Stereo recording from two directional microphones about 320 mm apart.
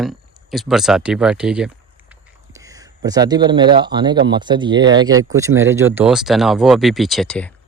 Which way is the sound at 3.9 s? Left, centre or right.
Centre.